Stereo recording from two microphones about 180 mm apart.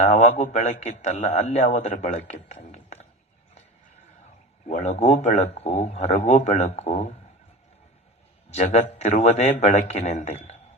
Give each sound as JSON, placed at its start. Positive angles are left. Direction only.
{"t": 0.0, "sound": "a man's voice", "side_deg": 35}
{"t": 4.7, "sound": "a man's voice", "side_deg": 40}
{"t": 8.4, "sound": "a man's voice", "side_deg": 35}